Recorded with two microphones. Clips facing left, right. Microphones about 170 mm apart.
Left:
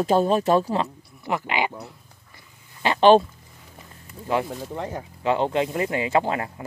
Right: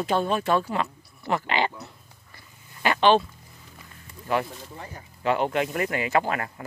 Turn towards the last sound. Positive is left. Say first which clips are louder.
# left 2 dB
turn(degrees=20)  # may be behind; listen again after turning